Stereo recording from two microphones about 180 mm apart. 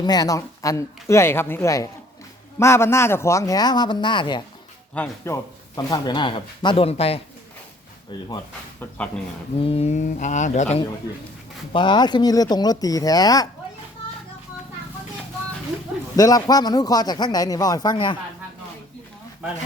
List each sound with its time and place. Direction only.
0.0 s a man's voice: 20° left (ahead or behind)
8.8 s speech: 5° left (ahead or behind)
9.6 s speech: 30° left (ahead or behind)
11.7 s a man's voice: 25° left (ahead or behind)
16.1 s a man's voice: 20° left (ahead or behind)